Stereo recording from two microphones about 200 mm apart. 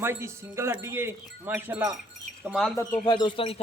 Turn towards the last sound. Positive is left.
turn(degrees=25)  # may be behind; listen again after turning